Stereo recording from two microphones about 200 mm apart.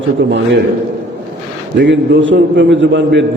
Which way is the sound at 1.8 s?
65° right (ahead or behind).